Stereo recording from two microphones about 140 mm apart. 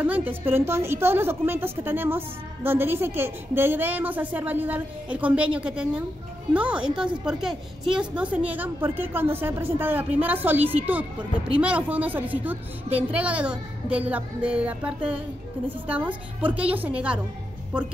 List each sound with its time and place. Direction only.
0.0 s a woman's voice: 10° right (ahead or behind)